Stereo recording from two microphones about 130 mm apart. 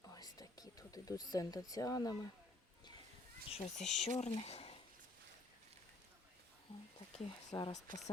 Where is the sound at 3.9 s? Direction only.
60° left (ahead or behind).